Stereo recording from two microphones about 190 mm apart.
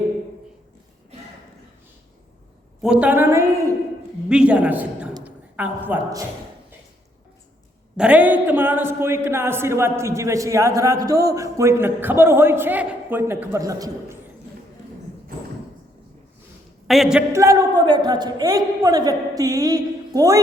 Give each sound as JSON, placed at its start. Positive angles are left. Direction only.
{"t": 2.8, "sound": "a man's voice", "side_deg": -5}
{"t": 4.3, "sound": "a man's voice", "side_deg": -5}
{"t": 7.9, "sound": "a man's voice", "side_deg": -5}
{"t": 16.8, "sound": "speech", "side_deg": 0}
{"t": 17.3, "sound": "a woman's voice", "side_deg": -15}